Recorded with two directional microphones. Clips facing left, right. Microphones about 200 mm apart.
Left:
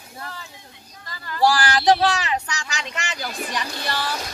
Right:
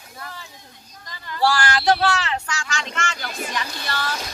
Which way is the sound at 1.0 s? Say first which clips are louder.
Left 1 dB; 15° right (ahead or behind).